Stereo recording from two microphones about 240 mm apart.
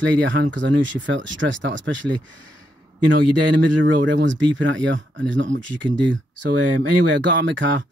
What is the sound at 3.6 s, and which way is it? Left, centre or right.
Speech, right.